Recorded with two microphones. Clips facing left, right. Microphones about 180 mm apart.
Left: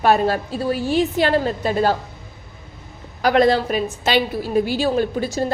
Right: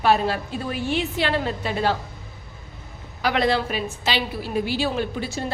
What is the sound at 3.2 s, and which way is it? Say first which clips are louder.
A woman's voice: left 6 dB; 45° left (ahead or behind).